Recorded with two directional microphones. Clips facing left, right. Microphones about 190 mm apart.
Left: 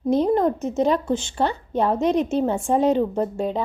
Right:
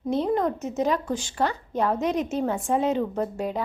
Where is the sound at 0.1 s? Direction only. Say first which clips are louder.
Left 5 dB; 35° left (ahead or behind).